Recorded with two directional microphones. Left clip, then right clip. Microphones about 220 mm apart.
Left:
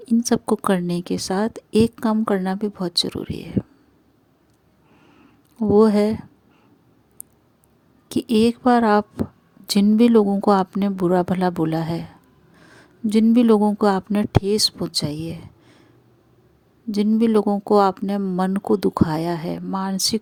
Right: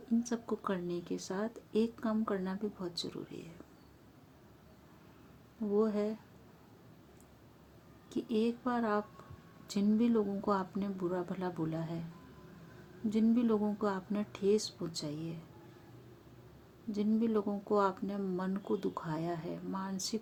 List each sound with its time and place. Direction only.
0.2 s a woman's voice: 50° left (ahead or behind)
5.7 s a woman's voice: 50° left (ahead or behind)
8.1 s a woman's voice: 50° left (ahead or behind)
13.1 s a woman's voice: 50° left (ahead or behind)
16.9 s a woman's voice: 50° left (ahead or behind)